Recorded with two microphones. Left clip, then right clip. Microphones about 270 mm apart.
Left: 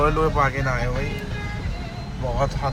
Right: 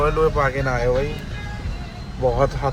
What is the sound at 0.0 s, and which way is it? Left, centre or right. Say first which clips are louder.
Speech: right 1 dB; centre.